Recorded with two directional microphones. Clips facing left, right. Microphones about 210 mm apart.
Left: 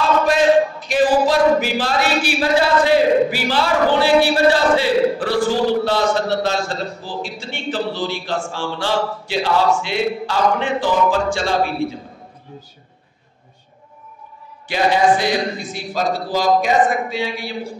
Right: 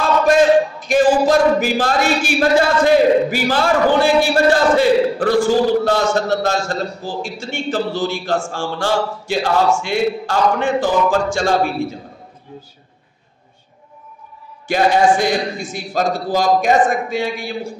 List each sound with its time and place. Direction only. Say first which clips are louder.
0.3 s a man's voice: right 3 dB; 45° right (ahead or behind)
14.7 s a man's voice: right 2 dB; 50° right (ahead or behind)